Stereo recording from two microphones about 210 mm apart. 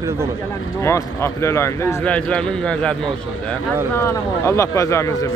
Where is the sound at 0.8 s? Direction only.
15° left (ahead or behind).